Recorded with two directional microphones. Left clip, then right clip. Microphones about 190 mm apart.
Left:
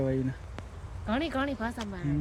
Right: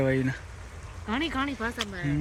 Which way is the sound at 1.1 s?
55° left (ahead or behind).